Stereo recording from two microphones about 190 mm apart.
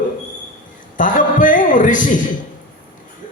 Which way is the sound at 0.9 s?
45° left (ahead or behind).